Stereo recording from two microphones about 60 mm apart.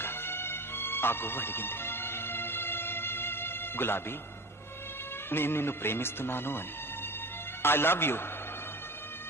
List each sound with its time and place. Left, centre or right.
0.0 s music: left
5.3 s speech: left
7.6 s speech: left